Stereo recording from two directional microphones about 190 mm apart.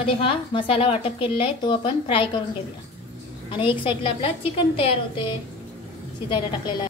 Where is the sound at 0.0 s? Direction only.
25° left (ahead or behind).